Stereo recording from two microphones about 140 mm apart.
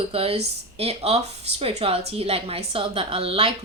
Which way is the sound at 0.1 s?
45° right (ahead or behind).